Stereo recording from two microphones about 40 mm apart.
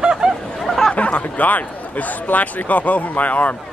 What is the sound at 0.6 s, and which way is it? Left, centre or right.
Chatter, centre.